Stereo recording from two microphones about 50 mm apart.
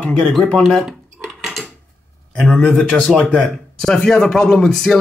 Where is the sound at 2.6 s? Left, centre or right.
Centre.